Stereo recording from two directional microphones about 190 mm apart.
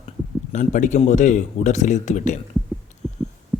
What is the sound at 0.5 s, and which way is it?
Speech, 40° left (ahead or behind).